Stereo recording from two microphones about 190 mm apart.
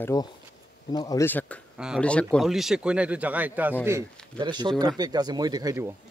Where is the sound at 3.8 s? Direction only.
20° right (ahead or behind).